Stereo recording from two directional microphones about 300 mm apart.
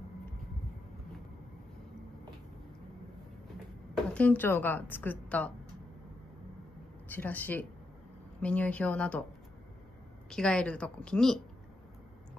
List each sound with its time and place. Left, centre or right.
4.1 s speech: centre
7.1 s speech: centre
10.3 s speech: centre